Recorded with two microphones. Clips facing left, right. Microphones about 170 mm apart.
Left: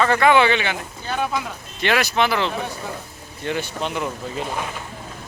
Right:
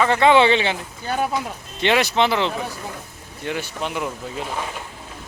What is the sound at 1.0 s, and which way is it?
Speech, 40° right (ahead or behind).